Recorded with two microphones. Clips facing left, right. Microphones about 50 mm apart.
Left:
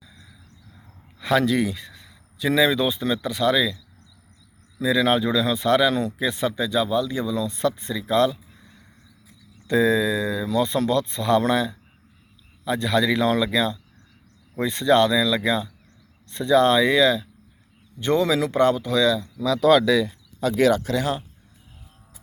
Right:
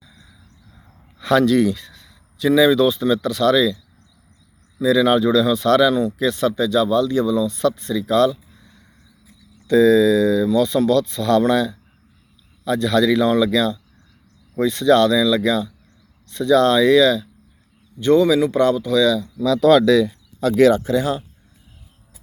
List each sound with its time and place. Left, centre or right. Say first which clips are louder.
1.2 s a sound: right 5 dB; centre
2.6 s speech: right 6 dB; centre
4.8 s speech: right 5 dB; left
5.9 s speech: right 5 dB; left
6.1 s speech: right 5 dB; left
7.4 s speech: right 4 dB; left
19.4 s speech: right 4 dB; centre
20.7 s speech: right 5 dB; centre